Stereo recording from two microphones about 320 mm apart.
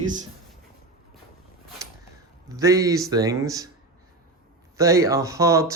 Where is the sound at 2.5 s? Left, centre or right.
Centre.